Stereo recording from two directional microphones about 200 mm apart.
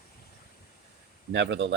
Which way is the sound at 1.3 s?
60° right (ahead or behind).